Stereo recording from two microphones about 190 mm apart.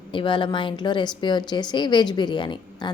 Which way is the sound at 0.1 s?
25° left (ahead or behind).